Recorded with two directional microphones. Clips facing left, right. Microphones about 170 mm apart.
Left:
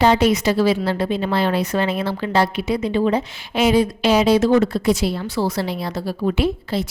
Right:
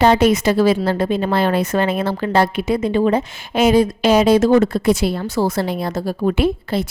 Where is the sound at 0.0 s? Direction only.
50° right (ahead or behind).